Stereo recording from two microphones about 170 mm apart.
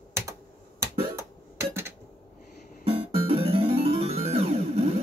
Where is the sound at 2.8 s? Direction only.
35° right (ahead or behind).